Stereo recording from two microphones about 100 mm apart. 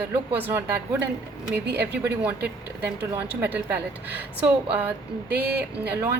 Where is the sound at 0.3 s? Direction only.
20° right (ahead or behind).